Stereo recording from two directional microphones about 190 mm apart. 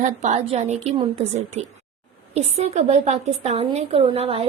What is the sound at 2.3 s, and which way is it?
Speech, 35° right (ahead or behind).